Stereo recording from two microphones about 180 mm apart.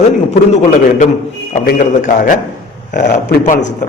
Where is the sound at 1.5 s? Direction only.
50° left (ahead or behind).